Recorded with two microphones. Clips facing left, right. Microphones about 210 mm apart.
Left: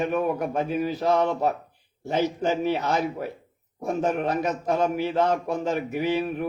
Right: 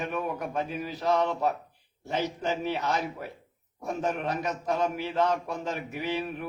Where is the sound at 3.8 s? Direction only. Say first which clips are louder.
Left 5 dB; 50° left (ahead or behind).